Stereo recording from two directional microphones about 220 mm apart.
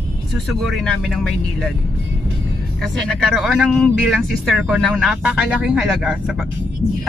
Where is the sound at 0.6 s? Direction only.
Centre (ahead or behind).